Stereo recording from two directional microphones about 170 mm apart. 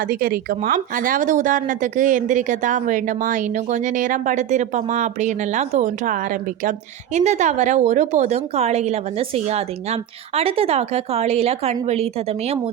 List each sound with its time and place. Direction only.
0.1 s a woman's voice: 55° right (ahead or behind); by 12.0 s 40° right (ahead or behind)